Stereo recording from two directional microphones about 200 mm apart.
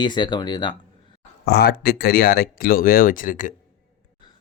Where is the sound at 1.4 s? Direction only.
50° left (ahead or behind).